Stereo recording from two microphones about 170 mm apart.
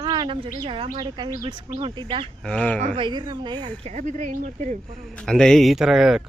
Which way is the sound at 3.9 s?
45° right (ahead or behind).